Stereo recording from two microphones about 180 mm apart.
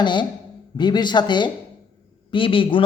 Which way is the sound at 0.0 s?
25° left (ahead or behind).